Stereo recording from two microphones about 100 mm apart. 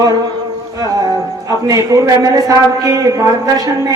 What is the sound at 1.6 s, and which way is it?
Speech, 35° right (ahead or behind).